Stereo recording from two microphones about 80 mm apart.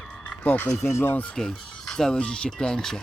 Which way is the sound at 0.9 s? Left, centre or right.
Left.